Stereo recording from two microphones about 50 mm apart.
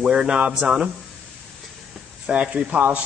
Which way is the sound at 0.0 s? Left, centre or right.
Centre.